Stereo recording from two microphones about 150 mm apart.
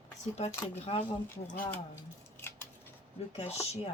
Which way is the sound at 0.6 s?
40° left (ahead or behind).